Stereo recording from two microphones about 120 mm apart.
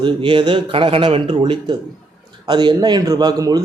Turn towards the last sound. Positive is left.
turn(degrees=-35)  # may be behind; listen again after turning